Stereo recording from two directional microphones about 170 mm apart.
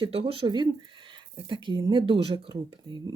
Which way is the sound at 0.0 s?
35° right (ahead or behind).